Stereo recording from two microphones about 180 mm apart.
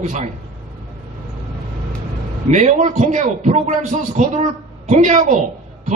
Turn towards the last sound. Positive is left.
turn(degrees=-40)  # may be behind; listen again after turning